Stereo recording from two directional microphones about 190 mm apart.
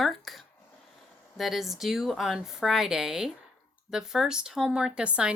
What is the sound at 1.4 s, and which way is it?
Speech, centre (ahead or behind).